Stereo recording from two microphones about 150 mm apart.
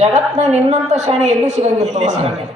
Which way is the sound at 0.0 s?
50° right (ahead or behind).